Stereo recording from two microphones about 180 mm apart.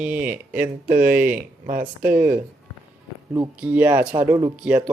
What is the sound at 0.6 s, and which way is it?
Speech, 50° right (ahead or behind).